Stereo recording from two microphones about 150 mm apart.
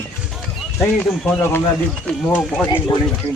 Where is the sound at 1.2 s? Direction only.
15° left (ahead or behind).